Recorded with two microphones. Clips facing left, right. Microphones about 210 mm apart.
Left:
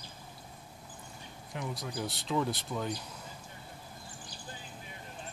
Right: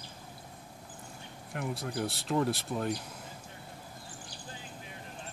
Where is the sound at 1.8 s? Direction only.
60° right (ahead or behind).